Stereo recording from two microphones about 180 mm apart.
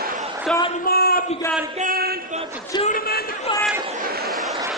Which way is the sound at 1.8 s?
55° right (ahead or behind).